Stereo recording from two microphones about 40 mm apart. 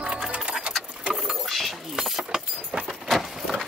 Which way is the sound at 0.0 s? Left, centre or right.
Centre.